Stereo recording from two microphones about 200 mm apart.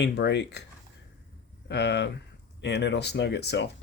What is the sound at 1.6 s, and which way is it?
Speech, 60° left (ahead or behind).